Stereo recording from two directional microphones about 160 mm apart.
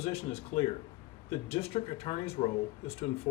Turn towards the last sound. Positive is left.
turn(degrees=40)  # may be behind; listen again after turning